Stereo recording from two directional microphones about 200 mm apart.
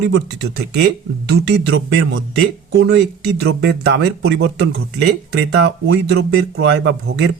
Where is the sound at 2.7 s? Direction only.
60° right (ahead or behind).